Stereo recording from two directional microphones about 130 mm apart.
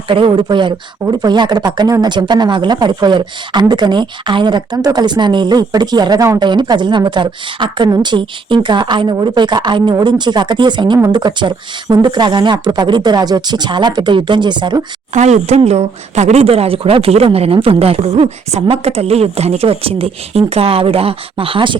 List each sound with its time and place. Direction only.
0.1 s speech: 40° right (ahead or behind)
15.1 s speech: 60° right (ahead or behind); by 21.8 s 40° right (ahead or behind)